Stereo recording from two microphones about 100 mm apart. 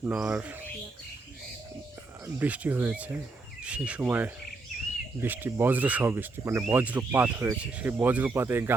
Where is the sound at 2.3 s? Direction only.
15° right (ahead or behind).